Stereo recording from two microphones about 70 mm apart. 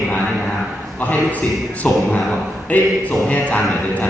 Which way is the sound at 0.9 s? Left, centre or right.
Left.